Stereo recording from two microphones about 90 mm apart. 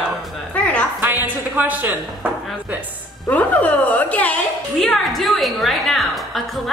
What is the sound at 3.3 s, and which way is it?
A woman's voice, 15° left (ahead or behind).